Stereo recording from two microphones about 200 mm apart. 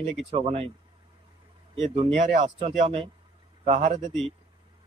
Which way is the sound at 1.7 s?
30° right (ahead or behind).